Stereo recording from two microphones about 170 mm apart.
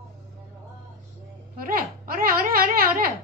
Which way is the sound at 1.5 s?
55° right (ahead or behind).